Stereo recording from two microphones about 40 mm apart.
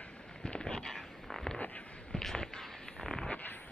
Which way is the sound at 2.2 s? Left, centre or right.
Centre.